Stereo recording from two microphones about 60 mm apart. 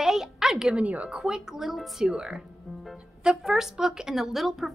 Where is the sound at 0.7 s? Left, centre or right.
Right.